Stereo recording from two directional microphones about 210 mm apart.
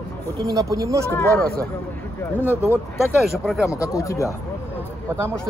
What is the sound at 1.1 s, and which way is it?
Speech, 5° left (ahead or behind).